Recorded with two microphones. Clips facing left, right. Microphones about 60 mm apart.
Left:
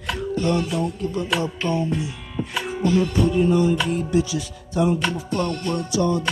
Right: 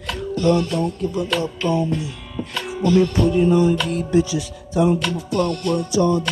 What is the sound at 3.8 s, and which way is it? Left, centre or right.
Music, centre.